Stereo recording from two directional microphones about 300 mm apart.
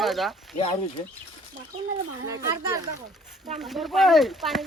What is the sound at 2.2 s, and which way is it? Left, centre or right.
Speech, centre.